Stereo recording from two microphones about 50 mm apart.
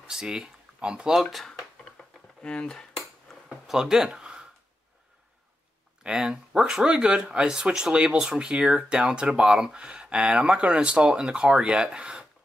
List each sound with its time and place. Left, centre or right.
0.0 s speech: centre
0.7 s speech: right
1.3 s a sound: centre
2.4 s speech: centre
3.4 s a sound: centre
6.0 s speech: centre